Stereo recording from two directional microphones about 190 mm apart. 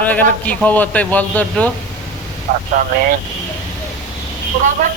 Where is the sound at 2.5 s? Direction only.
45° right (ahead or behind).